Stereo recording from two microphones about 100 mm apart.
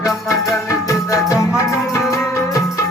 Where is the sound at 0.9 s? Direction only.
35° left (ahead or behind).